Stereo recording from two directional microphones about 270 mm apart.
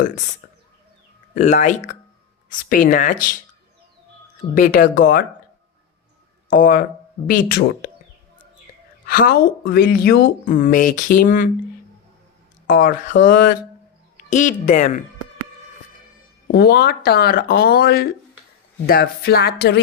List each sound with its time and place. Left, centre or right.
1.4 s speech: left
4.5 s speech: left
6.5 s speech: left
9.0 s speech: left
12.6 s speech: left
16.5 s speech: left